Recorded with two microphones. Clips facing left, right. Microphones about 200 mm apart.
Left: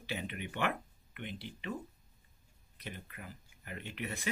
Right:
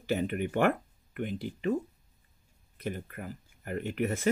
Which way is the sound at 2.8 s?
45° right (ahead or behind).